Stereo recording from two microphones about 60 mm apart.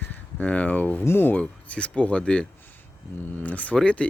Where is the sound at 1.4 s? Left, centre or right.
Left.